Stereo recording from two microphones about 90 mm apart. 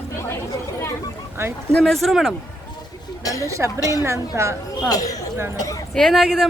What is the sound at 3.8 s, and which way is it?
Speech, 40° left (ahead or behind).